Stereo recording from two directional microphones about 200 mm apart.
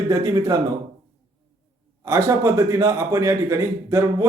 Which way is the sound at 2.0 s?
15° right (ahead or behind).